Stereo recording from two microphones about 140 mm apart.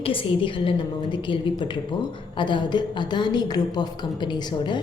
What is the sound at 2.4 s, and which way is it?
A woman's voice, 35° left (ahead or behind).